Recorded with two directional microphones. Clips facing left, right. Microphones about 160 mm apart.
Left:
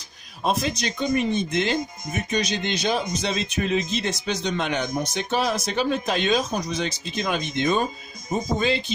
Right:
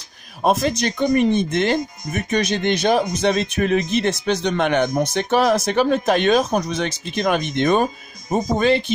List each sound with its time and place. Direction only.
0.4 s speech: 50° right (ahead or behind)